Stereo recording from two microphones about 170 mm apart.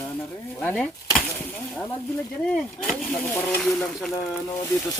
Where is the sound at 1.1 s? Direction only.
5° left (ahead or behind).